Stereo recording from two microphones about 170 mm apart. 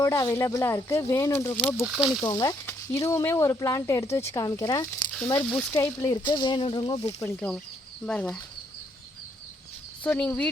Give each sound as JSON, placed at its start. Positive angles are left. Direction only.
{"t": 0.0, "sound": "speech", "side_deg": 20}
{"t": 1.8, "sound": "speech", "side_deg": -5}
{"t": 2.2, "sound": "speech", "side_deg": 20}
{"t": 5.4, "sound": "speech", "side_deg": 10}
{"t": 7.2, "sound": "speech", "side_deg": 10}
{"t": 10.0, "sound": "speech", "side_deg": 10}